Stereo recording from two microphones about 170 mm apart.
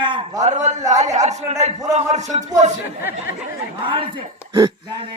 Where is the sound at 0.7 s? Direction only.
40° right (ahead or behind).